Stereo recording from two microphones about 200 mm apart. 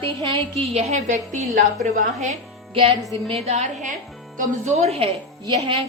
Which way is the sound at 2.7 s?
25° right (ahead or behind).